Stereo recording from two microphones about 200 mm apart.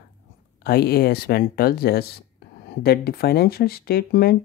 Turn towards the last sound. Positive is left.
turn(degrees=50)  # may be behind; listen again after turning